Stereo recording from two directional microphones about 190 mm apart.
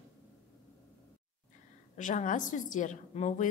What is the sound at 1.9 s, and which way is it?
A woman's voice, 40° left (ahead or behind).